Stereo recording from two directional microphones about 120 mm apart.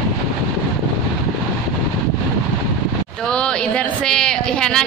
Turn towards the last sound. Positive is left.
turn(degrees=5)  # may be behind; listen again after turning